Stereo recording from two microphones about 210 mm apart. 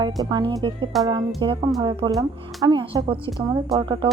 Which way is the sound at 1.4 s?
25° right (ahead or behind).